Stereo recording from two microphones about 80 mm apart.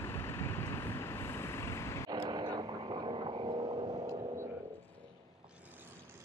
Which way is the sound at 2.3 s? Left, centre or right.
Right.